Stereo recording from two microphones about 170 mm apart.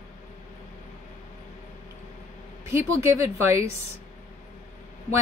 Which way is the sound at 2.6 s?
15° right (ahead or behind).